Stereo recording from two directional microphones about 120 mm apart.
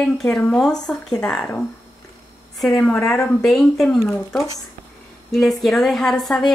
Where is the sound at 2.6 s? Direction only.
10° left (ahead or behind).